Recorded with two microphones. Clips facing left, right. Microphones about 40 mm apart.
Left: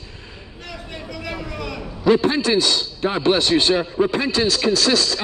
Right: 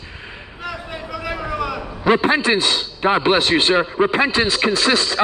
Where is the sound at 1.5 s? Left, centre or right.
Centre.